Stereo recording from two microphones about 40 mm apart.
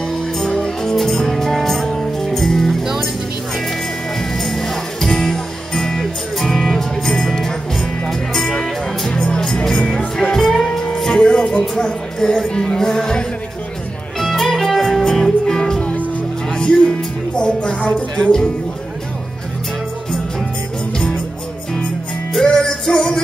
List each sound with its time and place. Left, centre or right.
0.1 s music: centre
4.4 s music: centre
9.1 s music: left
9.4 s music: centre
14.2 s music: centre; by 18.5 s left
22.4 s music: centre